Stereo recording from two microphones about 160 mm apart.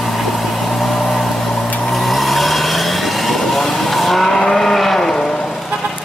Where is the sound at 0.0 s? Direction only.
Centre (ahead or behind).